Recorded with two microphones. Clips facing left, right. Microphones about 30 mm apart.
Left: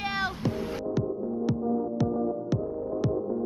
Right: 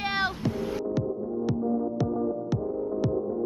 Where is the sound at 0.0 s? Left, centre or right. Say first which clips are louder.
Right 2 dB; right.